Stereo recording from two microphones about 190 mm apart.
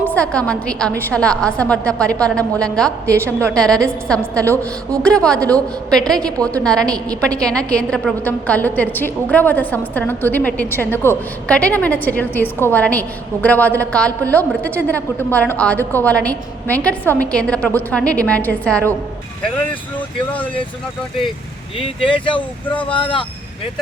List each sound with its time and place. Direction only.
0.1 s a woman's voice: 5° left (ahead or behind)
3.1 s a woman's voice: 15° right (ahead or behind)
3.5 s a woman's voice: 5° left (ahead or behind)
4.4 s a woman's voice: 15° right (ahead or behind)
5.0 s a woman's voice: 5° left (ahead or behind)
21.8 s speech: 25° left (ahead or behind)